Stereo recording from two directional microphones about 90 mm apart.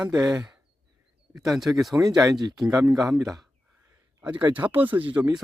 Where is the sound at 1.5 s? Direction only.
Centre (ahead or behind).